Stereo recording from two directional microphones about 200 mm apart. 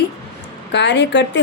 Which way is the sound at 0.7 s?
60° left (ahead or behind).